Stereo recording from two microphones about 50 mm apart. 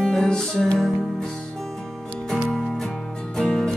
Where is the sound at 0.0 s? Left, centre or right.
Centre.